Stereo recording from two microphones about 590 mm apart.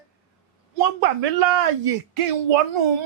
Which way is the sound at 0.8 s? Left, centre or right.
Right.